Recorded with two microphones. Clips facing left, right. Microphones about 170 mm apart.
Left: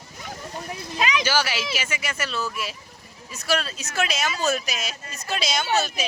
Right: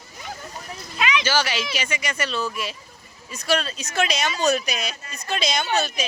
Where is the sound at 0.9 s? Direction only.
40° left (ahead or behind).